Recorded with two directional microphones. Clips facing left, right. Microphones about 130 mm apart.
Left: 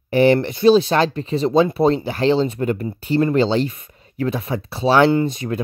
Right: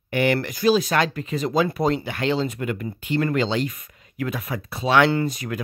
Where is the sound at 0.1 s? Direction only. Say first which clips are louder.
Left 7 dB; 30° left (ahead or behind).